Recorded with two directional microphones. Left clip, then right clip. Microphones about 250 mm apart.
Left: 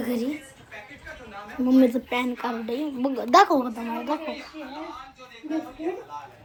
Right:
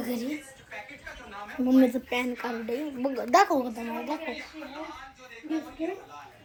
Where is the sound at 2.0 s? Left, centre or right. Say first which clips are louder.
Left 3 dB; left.